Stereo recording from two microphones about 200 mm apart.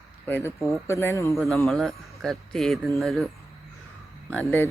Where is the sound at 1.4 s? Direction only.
Centre (ahead or behind).